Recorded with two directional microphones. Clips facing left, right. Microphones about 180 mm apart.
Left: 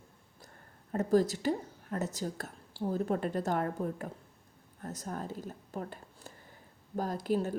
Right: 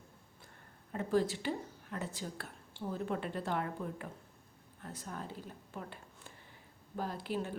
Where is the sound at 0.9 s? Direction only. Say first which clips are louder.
Left 5 dB; 40° left (ahead or behind).